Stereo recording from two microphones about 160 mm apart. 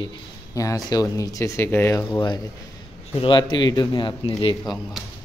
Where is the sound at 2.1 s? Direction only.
30° left (ahead or behind).